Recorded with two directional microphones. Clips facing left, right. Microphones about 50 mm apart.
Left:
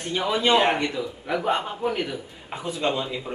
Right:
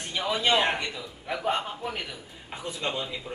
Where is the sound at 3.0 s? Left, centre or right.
Centre.